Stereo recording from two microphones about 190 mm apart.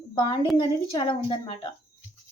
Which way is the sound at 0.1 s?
25° left (ahead or behind).